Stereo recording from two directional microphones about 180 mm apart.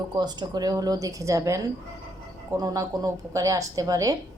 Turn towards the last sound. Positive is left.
turn(degrees=-20)  # may be behind; listen again after turning